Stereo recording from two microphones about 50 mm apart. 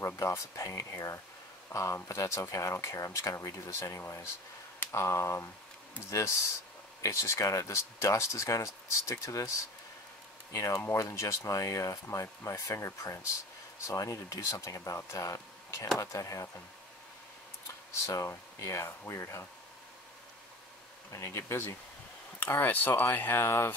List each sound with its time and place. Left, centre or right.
0.0 s speech: left
2.0 s speech: left
4.0 s speech: left
4.9 s speech: left
6.0 s speech: left
11.0 s speech: left
13.8 s speech: left
18.0 s speech: left
21.1 s speech: left
22.5 s speech: left